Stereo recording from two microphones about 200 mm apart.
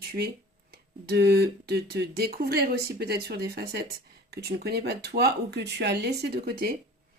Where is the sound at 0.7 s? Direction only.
55° right (ahead or behind).